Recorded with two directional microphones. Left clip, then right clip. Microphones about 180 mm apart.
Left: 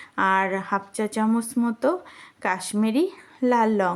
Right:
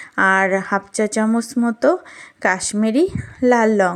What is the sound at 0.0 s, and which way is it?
Speech, 25° right (ahead or behind).